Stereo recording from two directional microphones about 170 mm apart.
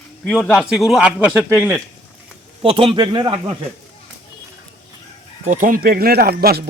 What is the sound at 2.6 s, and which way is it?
Speech, 30° right (ahead or behind).